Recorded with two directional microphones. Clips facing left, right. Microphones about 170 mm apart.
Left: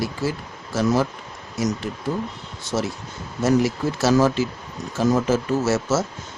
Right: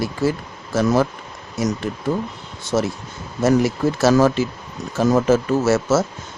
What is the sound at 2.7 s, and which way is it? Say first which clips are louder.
Speech: right 4 dB; 50° right (ahead or behind).